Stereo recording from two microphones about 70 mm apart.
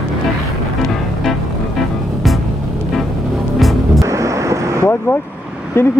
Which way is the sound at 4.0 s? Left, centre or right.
Right.